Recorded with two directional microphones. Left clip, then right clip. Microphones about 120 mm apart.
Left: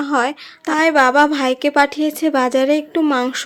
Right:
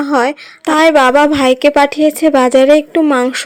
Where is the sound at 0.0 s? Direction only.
30° right (ahead or behind).